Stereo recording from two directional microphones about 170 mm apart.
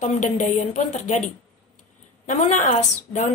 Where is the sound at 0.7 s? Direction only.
40° left (ahead or behind).